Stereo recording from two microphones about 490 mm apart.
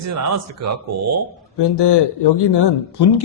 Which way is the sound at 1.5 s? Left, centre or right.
Left.